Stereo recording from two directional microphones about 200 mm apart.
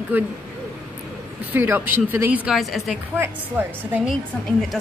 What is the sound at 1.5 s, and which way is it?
Speech, 10° right (ahead or behind).